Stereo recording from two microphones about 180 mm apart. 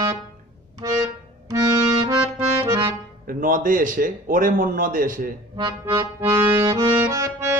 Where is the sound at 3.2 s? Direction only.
50° right (ahead or behind).